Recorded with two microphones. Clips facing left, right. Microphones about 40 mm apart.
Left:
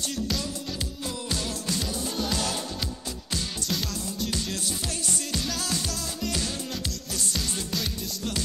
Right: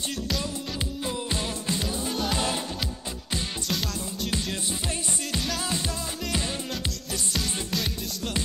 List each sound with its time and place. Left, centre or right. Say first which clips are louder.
1.0 s music: right 1 dB; right
4.3 s music: right 1 dB; right